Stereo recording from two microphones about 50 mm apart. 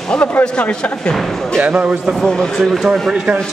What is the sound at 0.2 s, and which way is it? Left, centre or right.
Speech, left.